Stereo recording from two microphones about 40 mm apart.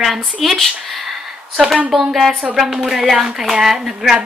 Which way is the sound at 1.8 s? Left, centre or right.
Centre.